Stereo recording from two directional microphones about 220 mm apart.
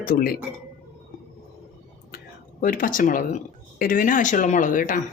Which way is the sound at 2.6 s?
40° left (ahead or behind).